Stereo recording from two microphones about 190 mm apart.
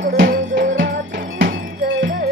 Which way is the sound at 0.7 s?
70° right (ahead or behind).